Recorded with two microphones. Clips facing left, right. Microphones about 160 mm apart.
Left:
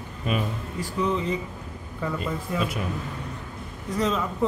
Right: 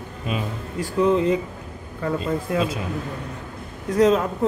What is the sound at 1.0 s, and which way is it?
Speech, 50° right (ahead or behind).